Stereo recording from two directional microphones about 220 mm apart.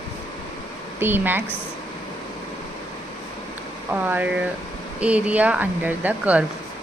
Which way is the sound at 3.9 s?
5° right (ahead or behind).